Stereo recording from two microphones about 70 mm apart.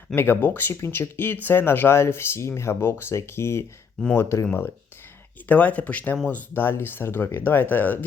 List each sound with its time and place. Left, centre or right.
0.2 s speech: left
5.5 s speech: left